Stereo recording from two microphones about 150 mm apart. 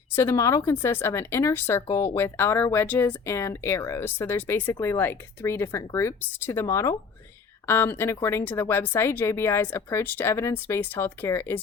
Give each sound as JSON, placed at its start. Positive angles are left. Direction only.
{"t": 0.2, "sound": "speech", "side_deg": 20}